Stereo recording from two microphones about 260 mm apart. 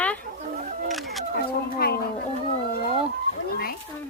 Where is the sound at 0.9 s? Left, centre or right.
Centre.